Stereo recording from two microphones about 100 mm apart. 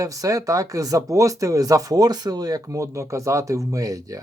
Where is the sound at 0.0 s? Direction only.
35° right (ahead or behind).